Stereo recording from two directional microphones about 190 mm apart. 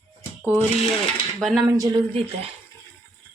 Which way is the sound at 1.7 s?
15° right (ahead or behind).